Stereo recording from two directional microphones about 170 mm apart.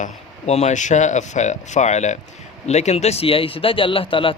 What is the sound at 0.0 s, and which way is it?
A man's voice, 40° left (ahead or behind).